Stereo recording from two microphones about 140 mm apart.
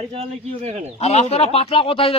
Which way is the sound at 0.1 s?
45° right (ahead or behind).